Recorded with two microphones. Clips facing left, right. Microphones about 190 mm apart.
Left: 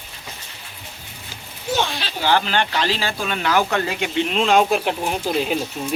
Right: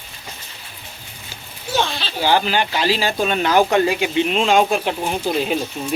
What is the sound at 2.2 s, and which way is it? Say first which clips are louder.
Speech: right 2 dB; 10° right (ahead or behind).